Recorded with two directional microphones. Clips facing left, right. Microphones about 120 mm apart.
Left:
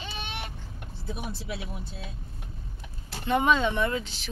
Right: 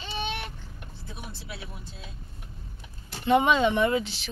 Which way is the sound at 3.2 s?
10° right (ahead or behind).